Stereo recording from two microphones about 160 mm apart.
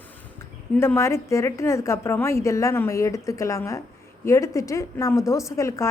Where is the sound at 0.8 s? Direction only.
15° left (ahead or behind).